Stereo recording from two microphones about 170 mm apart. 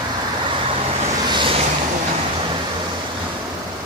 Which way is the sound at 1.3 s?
30° right (ahead or behind).